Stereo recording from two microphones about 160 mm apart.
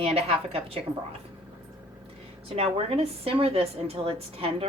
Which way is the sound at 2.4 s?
40° right (ahead or behind).